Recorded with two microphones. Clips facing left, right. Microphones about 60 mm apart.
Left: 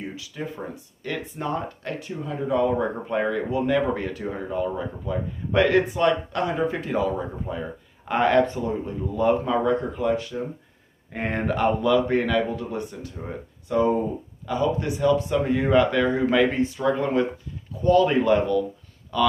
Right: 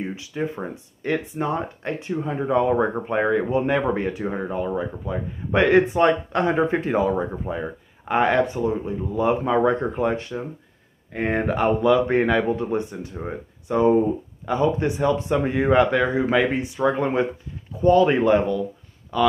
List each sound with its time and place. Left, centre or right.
0.0 s speech: right
9.6 s speech: right
11.2 s speech: centre